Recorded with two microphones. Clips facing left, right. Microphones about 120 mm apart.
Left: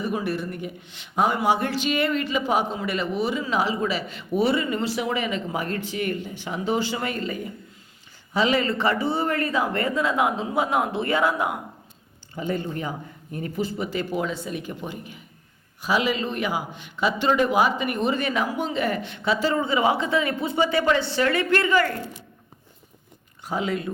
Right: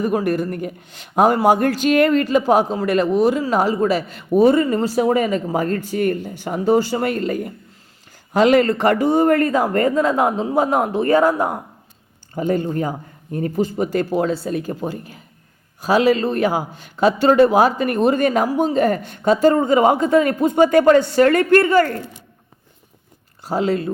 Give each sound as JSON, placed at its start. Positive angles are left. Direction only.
{"t": 0.0, "sound": "a man's voice", "side_deg": -45}
{"t": 23.5, "sound": "speech", "side_deg": -35}